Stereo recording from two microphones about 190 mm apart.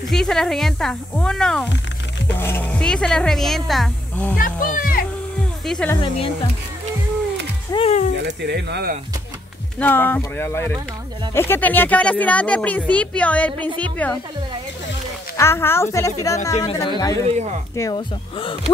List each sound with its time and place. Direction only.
0.1 s speech: 5° left (ahead or behind)
4.4 s speech: 45° left (ahead or behind)
5.7 s speech: 5° left (ahead or behind)
5.9 s speech: 30° left (ahead or behind)
7.7 s music: 35° left (ahead or behind)
8.2 s speech: 60° right (ahead or behind)
9.8 s speech: 10° left (ahead or behind)
15.3 s speech: 15° left (ahead or behind)
17.3 s speech: 35° right (ahead or behind)
17.7 s speech: 20° left (ahead or behind)